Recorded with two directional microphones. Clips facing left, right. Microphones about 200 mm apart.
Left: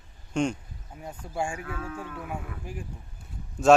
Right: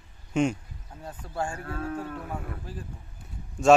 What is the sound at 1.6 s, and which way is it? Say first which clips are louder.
Speech: right 3 dB; 35° right (ahead or behind).